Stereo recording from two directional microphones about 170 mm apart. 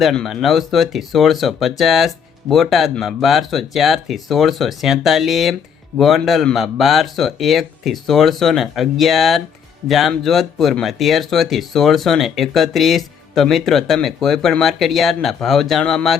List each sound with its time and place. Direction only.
0.0 s speech: centre (ahead or behind)